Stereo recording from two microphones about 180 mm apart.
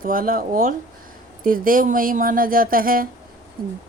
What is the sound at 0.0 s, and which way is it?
A woman's voice, 50° right (ahead or behind).